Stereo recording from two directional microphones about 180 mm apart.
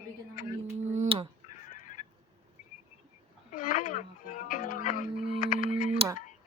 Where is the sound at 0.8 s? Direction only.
40° right (ahead or behind).